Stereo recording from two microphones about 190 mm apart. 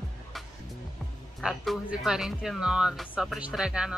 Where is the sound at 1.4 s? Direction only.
Centre (ahead or behind).